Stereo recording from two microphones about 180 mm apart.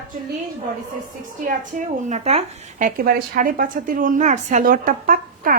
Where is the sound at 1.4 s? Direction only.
45° right (ahead or behind).